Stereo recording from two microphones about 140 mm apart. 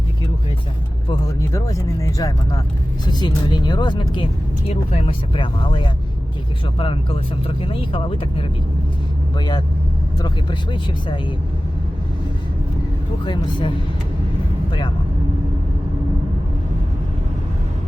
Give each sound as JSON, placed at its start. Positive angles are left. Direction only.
{"t": 1.4, "sound": "speech", "side_deg": 25}
{"t": 4.7, "sound": "speech", "side_deg": 45}
{"t": 13.2, "sound": "speech", "side_deg": 35}